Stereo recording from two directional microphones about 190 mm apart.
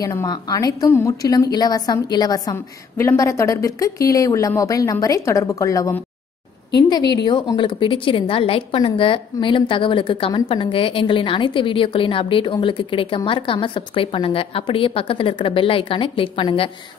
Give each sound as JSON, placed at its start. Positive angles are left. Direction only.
{"t": 0.0, "sound": "a woman's voice", "side_deg": 20}